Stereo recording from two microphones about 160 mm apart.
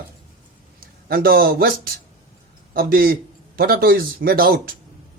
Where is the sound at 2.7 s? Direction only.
65° right (ahead or behind).